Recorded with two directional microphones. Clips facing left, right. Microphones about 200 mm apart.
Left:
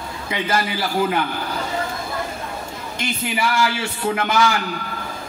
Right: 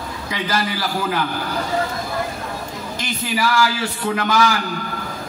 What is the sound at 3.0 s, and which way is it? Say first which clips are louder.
A man's voice: even; 25° left (ahead or behind).